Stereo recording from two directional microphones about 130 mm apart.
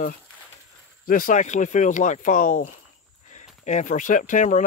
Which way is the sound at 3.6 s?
75° left (ahead or behind).